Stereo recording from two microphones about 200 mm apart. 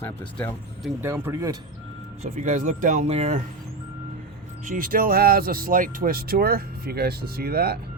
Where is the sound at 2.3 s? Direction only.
35° right (ahead or behind).